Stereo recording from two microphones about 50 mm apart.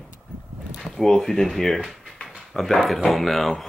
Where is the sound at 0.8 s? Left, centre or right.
Centre.